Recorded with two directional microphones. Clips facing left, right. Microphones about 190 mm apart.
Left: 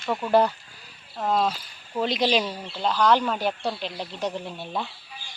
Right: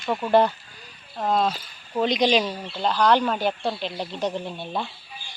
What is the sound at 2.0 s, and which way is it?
Speech, 5° left (ahead or behind).